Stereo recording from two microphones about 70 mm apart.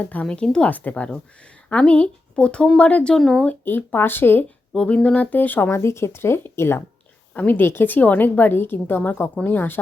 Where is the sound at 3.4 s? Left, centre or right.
Left.